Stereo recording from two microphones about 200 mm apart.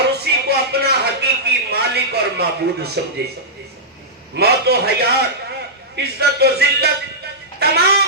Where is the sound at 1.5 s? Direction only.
55° right (ahead or behind).